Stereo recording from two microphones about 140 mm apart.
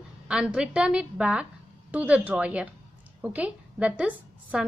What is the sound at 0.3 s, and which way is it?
A woman's voice, 5° right (ahead or behind).